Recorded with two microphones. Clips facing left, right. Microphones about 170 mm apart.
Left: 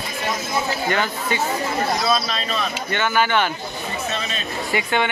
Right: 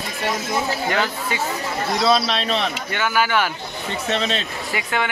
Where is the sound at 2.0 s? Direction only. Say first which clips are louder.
Right 3 dB; 75° right (ahead or behind).